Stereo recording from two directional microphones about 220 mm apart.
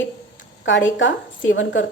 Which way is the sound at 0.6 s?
55° left (ahead or behind).